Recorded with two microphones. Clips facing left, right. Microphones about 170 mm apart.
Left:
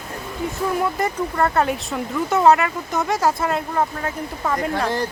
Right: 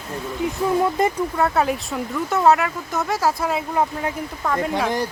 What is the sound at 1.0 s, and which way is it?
Speech, 20° right (ahead or behind).